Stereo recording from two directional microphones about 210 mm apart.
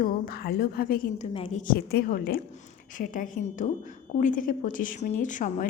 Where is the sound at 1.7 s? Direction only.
45° left (ahead or behind).